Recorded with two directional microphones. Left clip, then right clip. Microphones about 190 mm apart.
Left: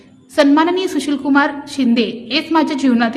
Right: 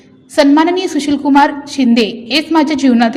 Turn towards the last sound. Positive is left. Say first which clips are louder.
# right 4 dB
turn(degrees=-10)  # may be behind; listen again after turning